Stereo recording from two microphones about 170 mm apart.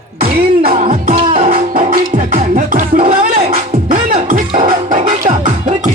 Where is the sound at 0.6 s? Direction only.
45° right (ahead or behind).